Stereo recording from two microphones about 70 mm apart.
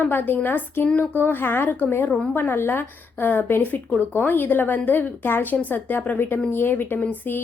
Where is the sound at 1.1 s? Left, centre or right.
Left.